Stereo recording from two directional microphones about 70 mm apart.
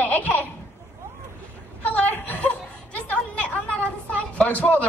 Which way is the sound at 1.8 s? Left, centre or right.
Left.